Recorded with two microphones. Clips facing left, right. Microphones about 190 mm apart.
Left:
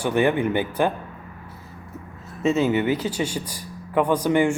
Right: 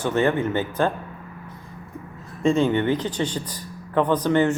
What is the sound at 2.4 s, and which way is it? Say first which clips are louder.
Speech: right 1 dB; 5° left (ahead or behind).